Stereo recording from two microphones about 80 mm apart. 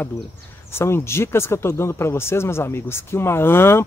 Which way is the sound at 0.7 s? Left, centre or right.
Left.